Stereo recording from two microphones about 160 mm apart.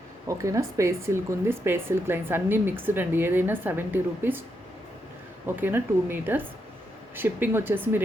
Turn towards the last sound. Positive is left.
turn(degrees=-15)  # may be behind; listen again after turning